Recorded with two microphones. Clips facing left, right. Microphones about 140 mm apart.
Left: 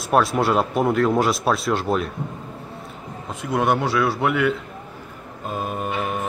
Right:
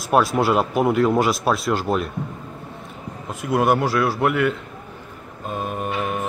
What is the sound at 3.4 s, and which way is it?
Speech, 5° right (ahead or behind).